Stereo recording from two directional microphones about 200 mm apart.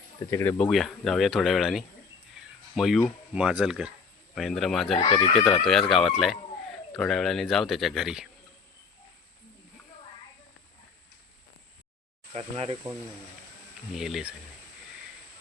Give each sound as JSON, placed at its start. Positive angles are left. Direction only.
{"t": 0.3, "sound": "speech", "side_deg": 10}
{"t": 2.3, "sound": "a sound", "side_deg": 0}
{"t": 3.3, "sound": "speech", "side_deg": -5}
{"t": 4.9, "sound": "speech", "side_deg": 30}
{"t": 5.6, "sound": "speech", "side_deg": 0}
{"t": 12.3, "sound": "speech", "side_deg": -30}
{"t": 13.9, "sound": "speech", "side_deg": 0}